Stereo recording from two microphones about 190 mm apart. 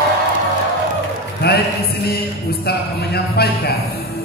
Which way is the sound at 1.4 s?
55° left (ahead or behind).